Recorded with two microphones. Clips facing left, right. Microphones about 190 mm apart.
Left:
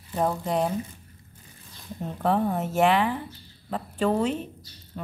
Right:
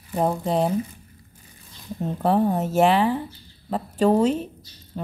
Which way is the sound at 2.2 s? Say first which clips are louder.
Right 3 dB; 30° right (ahead or behind).